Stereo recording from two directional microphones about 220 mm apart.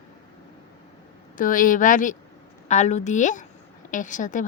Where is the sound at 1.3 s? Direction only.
40° left (ahead or behind).